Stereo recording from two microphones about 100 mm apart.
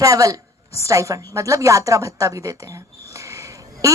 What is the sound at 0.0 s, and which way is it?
A woman's voice, 35° right (ahead or behind).